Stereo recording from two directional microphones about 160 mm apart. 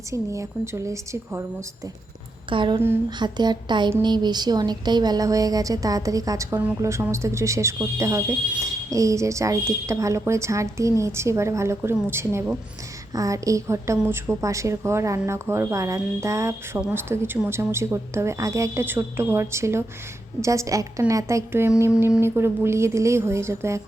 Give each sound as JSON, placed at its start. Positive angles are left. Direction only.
{"t": 0.1, "sound": "a woman's voice", "side_deg": -20}
{"t": 2.5, "sound": "a sound", "side_deg": -30}
{"t": 3.2, "sound": "a woman's voice", "side_deg": -25}